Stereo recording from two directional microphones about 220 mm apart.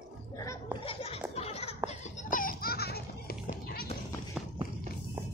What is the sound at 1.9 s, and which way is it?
Music, 40° left (ahead or behind).